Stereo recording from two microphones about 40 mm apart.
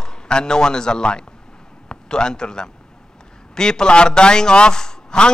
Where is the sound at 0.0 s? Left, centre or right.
Centre.